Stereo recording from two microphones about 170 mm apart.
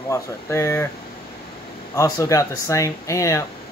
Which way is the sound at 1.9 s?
20° left (ahead or behind).